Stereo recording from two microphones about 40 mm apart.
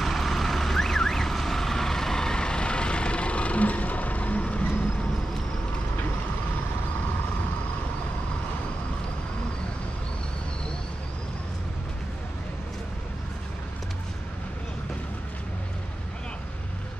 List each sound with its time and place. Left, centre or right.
0.0 s vehicle: centre; by 4.6 s left